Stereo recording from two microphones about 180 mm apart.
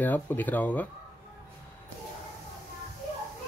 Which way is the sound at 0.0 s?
10° left (ahead or behind).